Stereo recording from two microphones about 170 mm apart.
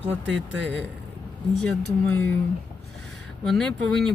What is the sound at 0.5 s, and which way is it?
Speech, 90° right.